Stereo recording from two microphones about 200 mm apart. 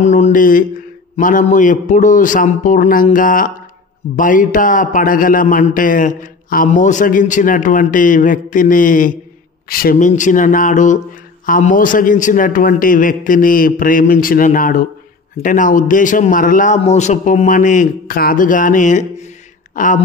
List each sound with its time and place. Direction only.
0.0 s a man's voice: 35° left (ahead or behind)